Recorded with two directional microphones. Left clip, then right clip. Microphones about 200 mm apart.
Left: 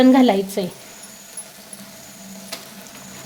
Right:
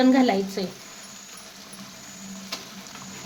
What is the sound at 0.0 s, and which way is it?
Speech, 40° left (ahead or behind).